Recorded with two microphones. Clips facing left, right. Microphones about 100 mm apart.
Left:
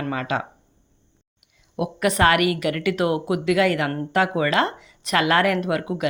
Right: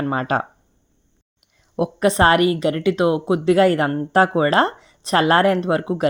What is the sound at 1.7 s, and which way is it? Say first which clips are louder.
Speech: right 4 dB; 30° right (ahead or behind).